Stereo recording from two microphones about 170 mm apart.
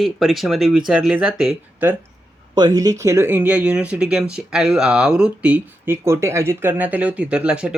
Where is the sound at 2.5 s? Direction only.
25° right (ahead or behind).